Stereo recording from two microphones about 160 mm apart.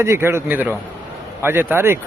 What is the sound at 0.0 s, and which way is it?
Speech, 15° right (ahead or behind).